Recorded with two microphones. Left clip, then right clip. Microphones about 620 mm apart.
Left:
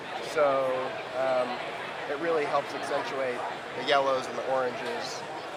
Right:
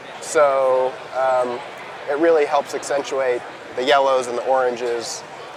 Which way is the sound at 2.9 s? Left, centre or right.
Right.